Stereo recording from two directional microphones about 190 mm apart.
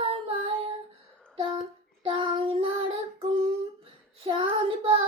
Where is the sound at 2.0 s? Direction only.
30° right (ahead or behind).